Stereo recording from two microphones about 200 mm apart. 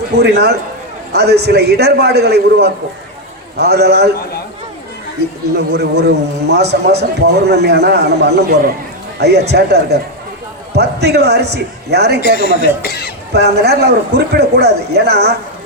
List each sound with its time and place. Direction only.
0.2 s a man's voice: 55° right (ahead or behind)
5.5 s a man's voice: 55° right (ahead or behind)
12.2 s speech: 50° left (ahead or behind)
13.3 s a man's voice: 55° right (ahead or behind)